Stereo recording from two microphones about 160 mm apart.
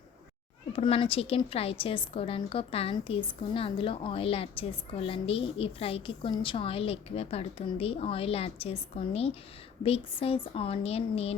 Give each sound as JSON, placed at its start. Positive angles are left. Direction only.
{"t": 0.7, "sound": "a woman's voice", "side_deg": 35}